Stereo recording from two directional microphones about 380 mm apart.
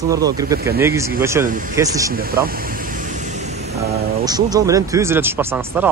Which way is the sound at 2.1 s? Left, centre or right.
Right.